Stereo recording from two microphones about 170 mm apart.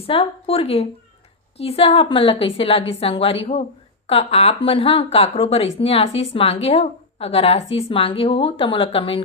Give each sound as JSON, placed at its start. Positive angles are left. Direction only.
{"t": 0.0, "sound": "a woman's voice", "side_deg": 35}